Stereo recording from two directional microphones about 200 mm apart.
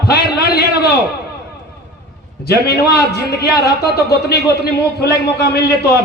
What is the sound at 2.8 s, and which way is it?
A man's voice, 55° left (ahead or behind).